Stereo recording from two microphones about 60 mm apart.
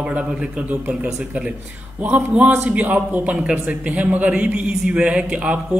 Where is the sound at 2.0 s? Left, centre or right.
Right.